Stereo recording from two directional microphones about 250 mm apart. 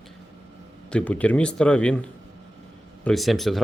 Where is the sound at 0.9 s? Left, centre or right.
Centre.